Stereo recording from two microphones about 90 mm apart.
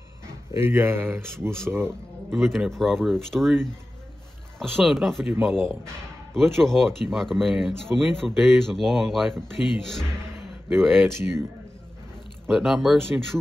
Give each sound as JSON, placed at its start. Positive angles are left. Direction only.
{"t": 0.5, "sound": "speech", "side_deg": -25}
{"t": 2.3, "sound": "speech", "side_deg": 0}
{"t": 4.6, "sound": "speech", "side_deg": 0}
{"t": 6.3, "sound": "speech", "side_deg": 5}
{"t": 11.1, "sound": "speech", "side_deg": -30}
{"t": 12.4, "sound": "speech", "side_deg": -5}